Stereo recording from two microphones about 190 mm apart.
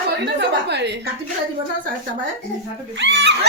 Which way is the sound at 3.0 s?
70° right (ahead or behind).